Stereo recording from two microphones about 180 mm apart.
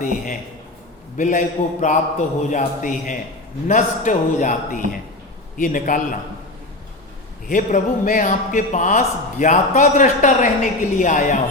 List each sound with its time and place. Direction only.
1.1 s a man's voice: 45° left (ahead or behind)
7.4 s a man's voice: 50° left (ahead or behind)